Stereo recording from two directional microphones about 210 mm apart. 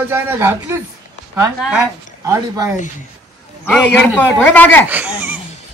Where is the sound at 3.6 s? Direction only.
5° left (ahead or behind).